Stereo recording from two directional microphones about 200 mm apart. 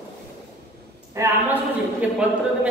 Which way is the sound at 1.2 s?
15° right (ahead or behind).